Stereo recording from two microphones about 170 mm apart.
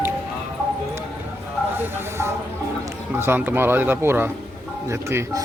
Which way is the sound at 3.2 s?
10° right (ahead or behind).